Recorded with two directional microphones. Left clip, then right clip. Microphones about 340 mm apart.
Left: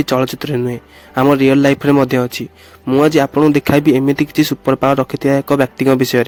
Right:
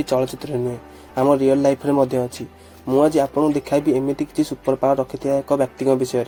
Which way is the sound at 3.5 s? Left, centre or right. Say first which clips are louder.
Left 6 dB; left.